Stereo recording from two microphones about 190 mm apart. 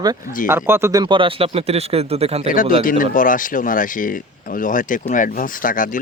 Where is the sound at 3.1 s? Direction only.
45° left (ahead or behind).